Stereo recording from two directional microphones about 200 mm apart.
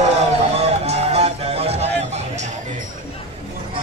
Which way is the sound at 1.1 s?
30° right (ahead or behind).